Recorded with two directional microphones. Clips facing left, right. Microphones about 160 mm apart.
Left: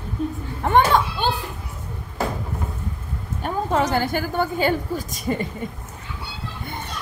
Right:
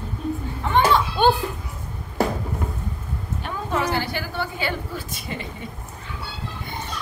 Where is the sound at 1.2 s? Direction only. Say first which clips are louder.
Right 6 dB; 55° right (ahead or behind).